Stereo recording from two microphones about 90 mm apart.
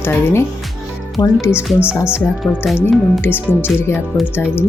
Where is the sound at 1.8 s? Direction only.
10° right (ahead or behind).